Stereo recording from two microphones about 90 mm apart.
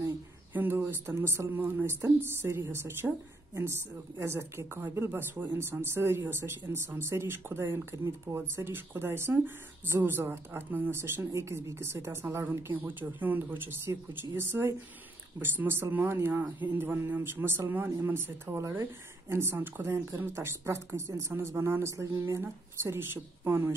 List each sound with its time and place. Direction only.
0.5 s a woman's voice: 20° right (ahead or behind)